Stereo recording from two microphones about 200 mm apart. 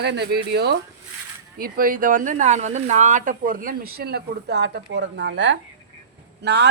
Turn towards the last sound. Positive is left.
turn(degrees=-55)  # may be behind; listen again after turning